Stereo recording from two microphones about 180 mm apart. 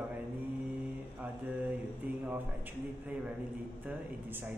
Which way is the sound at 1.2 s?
10° right (ahead or behind).